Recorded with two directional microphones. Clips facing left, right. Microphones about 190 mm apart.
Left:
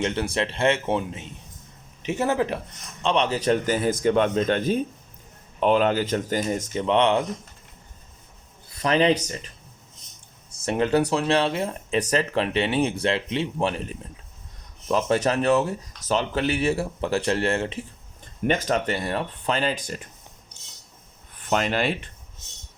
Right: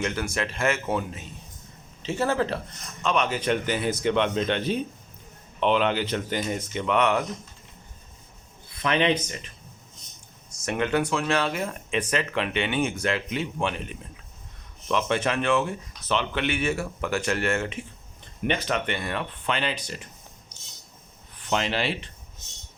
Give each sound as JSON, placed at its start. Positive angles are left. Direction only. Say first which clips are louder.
{"t": 0.0, "sound": "speech", "louder": "left 3 dB", "side_deg": 30}
{"t": 3.0, "sound": "speech", "louder": "left 3 dB", "side_deg": 30}
{"t": 8.8, "sound": "speech", "louder": "left 3 dB", "side_deg": 35}
{"t": 10.7, "sound": "speech", "louder": "left 4 dB", "side_deg": 35}
{"t": 18.4, "sound": "speech", "louder": "left 3 dB", "side_deg": 40}
{"t": 21.5, "sound": "speech", "louder": "left 3 dB", "side_deg": 50}